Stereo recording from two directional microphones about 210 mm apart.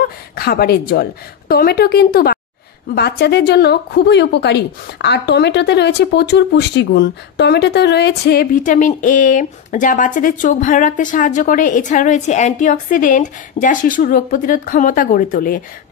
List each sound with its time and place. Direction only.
0.4 s a woman's voice: 45° left (ahead or behind)